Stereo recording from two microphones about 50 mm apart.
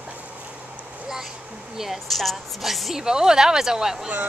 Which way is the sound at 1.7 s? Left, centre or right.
Centre.